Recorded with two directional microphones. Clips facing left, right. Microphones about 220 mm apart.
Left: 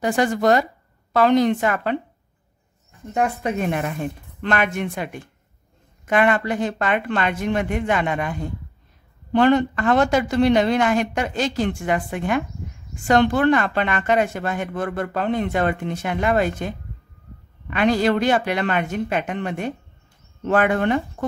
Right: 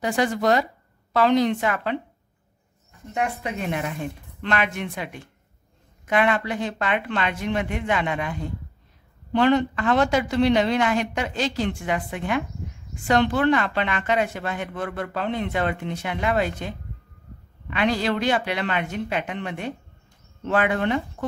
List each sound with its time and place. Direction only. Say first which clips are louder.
0.0 s speech: left 3 dB; 45° left (ahead or behind)
3.2 s speech: left 5 dB; 45° left (ahead or behind)